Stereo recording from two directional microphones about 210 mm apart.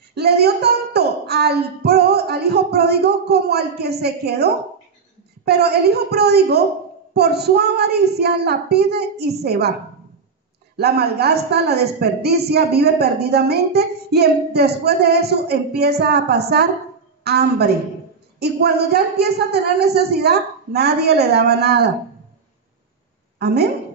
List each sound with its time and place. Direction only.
0.1 s a woman's voice: 50° right (ahead or behind)
10.8 s a woman's voice: 50° right (ahead or behind)